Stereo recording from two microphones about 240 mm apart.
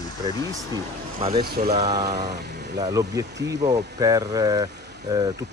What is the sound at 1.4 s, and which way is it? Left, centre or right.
Speech, right.